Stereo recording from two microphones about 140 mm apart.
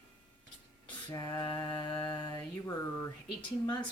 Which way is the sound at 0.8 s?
25° left (ahead or behind).